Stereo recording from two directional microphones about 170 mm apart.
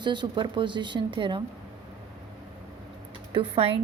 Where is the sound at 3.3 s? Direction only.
30° right (ahead or behind).